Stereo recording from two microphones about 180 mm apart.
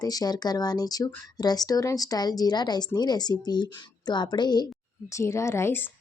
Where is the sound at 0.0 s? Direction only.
20° left (ahead or behind).